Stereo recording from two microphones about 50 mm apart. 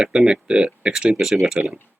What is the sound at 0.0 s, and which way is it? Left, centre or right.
Speech, centre.